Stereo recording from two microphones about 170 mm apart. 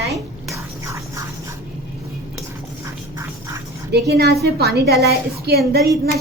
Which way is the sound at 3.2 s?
20° right (ahead or behind).